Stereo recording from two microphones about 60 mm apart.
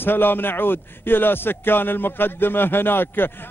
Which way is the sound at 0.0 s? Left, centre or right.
Left.